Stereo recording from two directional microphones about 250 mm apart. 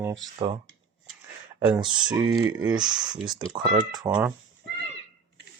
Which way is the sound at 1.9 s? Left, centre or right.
Centre.